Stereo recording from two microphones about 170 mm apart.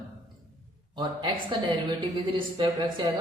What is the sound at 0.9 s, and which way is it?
A man's voice, 25° right (ahead or behind).